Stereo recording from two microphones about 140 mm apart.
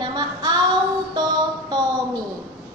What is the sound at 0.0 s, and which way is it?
Child singing, 30° right (ahead or behind).